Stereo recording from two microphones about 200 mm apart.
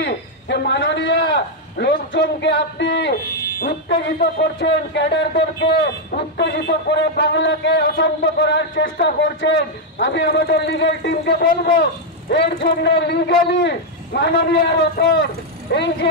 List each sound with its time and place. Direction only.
0.0 s a man's voice: 60° left (ahead or behind)